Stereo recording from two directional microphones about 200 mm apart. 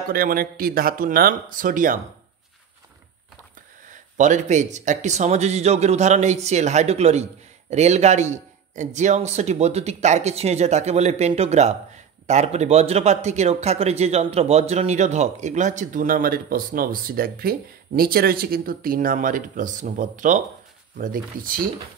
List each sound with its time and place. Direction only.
0.1 s speech: 45° right (ahead or behind)
4.2 s speech: 35° right (ahead or behind)